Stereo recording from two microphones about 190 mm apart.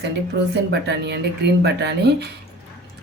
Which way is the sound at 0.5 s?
65° right (ahead or behind).